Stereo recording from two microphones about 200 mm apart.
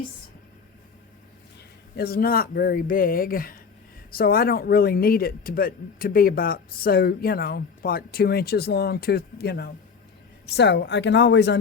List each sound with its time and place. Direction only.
2.0 s a woman's voice: 50° left (ahead or behind)